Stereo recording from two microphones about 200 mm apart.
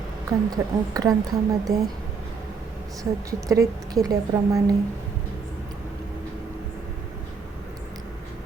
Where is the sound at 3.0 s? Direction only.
15° right (ahead or behind).